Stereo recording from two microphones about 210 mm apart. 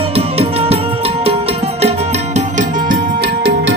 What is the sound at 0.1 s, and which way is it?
Music, 30° right (ahead or behind).